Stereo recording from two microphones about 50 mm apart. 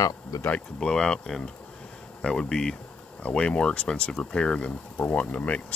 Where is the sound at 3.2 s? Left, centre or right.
Left.